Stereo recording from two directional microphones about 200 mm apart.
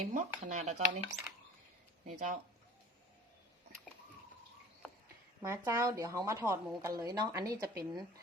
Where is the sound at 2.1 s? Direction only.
40° right (ahead or behind).